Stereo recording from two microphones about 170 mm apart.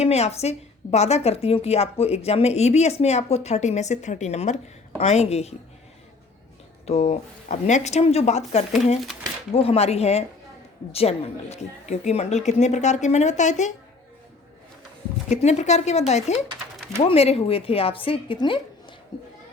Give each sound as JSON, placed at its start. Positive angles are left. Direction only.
{"t": 0.0, "sound": "a woman's voice", "side_deg": 40}
{"t": 6.8, "sound": "a woman's voice", "side_deg": 40}
{"t": 15.3, "sound": "a woman's voice", "side_deg": 40}